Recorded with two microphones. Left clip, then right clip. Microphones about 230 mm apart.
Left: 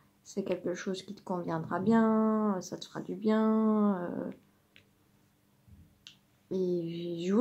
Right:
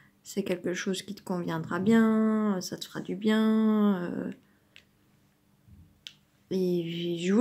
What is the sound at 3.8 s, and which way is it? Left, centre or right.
Dog, right.